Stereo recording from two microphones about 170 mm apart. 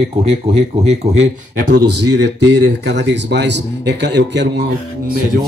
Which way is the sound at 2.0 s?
90° right.